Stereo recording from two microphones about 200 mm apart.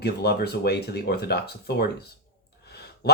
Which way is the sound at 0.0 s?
55° left (ahead or behind).